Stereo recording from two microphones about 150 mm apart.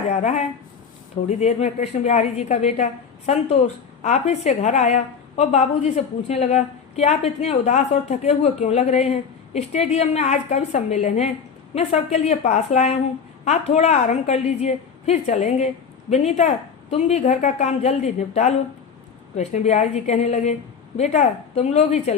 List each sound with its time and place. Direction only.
0.1 s a woman's voice: 50° left (ahead or behind)
4.0 s a woman's voice: 50° left (ahead or behind)